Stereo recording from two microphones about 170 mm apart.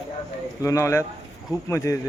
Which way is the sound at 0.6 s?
15° left (ahead or behind).